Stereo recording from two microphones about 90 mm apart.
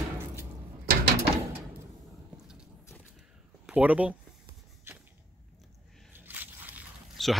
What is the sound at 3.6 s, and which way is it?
Speech, 15° right (ahead or behind).